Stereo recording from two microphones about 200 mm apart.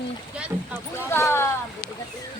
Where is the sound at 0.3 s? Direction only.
5° right (ahead or behind).